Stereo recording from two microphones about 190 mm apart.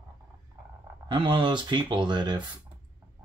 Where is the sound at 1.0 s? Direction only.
25° right (ahead or behind).